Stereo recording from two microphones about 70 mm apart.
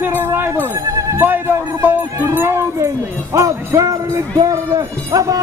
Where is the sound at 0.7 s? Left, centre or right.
Right.